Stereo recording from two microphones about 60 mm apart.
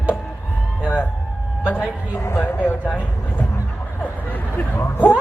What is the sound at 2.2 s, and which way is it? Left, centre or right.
Speech, left.